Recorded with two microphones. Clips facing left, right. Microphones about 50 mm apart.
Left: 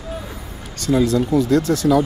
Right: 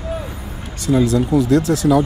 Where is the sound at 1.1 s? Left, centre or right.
Right.